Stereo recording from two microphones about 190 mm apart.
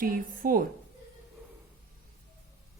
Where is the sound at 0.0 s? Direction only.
50° right (ahead or behind).